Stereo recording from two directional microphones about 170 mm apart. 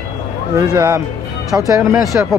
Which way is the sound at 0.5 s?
20° right (ahead or behind).